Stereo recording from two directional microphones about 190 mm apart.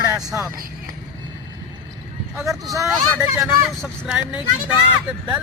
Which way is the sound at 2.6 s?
15° right (ahead or behind).